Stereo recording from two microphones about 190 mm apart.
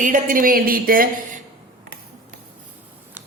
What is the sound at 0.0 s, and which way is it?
A woman's voice, 45° right (ahead or behind).